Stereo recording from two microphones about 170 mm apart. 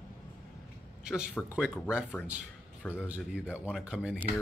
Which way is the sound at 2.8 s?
10° left (ahead or behind).